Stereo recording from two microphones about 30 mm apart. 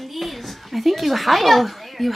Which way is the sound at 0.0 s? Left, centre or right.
Centre.